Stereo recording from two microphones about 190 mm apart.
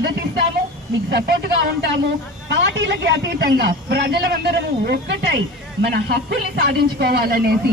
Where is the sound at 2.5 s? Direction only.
65° right (ahead or behind).